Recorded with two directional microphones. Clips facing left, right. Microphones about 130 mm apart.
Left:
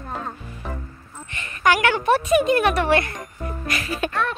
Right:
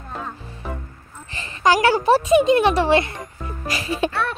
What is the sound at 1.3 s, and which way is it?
Speech, 30° right (ahead or behind).